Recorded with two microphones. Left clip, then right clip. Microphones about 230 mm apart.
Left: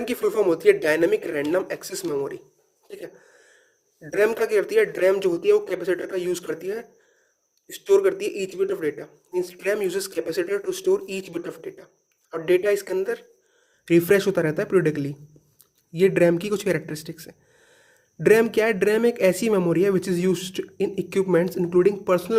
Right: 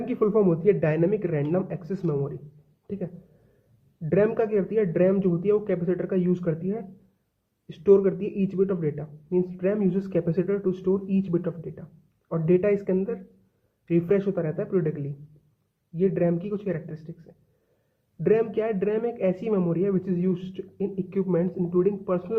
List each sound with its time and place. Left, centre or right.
0.0 s speech: left
4.0 s speech: left